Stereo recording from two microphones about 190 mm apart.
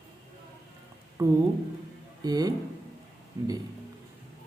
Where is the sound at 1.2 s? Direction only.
15° right (ahead or behind).